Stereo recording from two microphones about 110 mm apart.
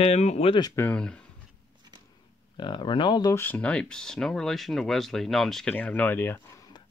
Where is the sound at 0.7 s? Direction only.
15° left (ahead or behind).